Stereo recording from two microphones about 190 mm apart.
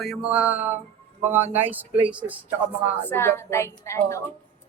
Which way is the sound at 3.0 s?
10° left (ahead or behind).